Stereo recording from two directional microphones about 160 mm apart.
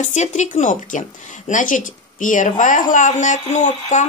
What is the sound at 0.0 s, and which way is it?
A woman's voice, 45° left (ahead or behind).